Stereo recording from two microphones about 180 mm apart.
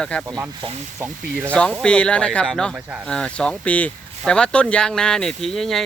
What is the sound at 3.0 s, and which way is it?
Speech, 5° left (ahead or behind).